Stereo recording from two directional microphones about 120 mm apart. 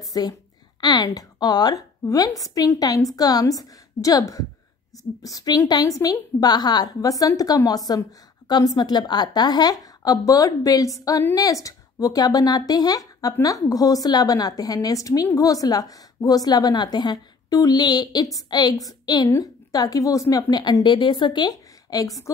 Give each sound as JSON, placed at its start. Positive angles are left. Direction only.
{"t": 0.0, "sound": "a woman's voice", "side_deg": 30}